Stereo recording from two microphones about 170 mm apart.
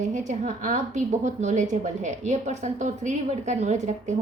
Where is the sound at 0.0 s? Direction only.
45° right (ahead or behind).